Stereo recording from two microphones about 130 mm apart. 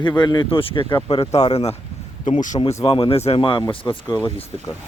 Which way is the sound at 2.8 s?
45° left (ahead or behind).